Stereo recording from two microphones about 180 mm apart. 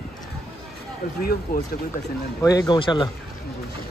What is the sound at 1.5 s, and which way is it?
Speech, 55° left (ahead or behind).